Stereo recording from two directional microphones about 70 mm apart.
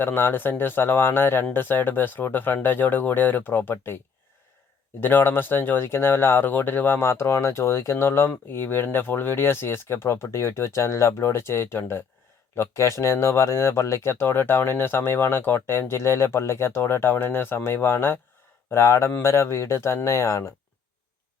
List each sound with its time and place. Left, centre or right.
0.0 s speech: left
4.9 s speech: left